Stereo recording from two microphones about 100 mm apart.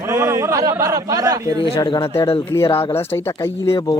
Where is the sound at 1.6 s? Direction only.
60° left (ahead or behind).